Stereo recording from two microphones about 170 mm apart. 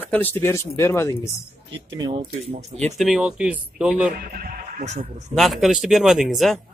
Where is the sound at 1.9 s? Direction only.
25° right (ahead or behind).